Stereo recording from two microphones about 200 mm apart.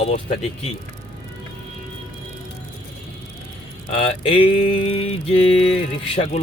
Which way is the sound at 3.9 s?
30° left (ahead or behind).